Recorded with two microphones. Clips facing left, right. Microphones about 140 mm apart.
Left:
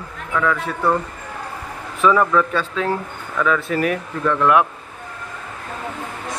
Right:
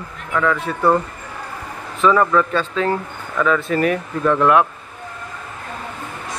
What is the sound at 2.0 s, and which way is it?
Speech, 5° left (ahead or behind).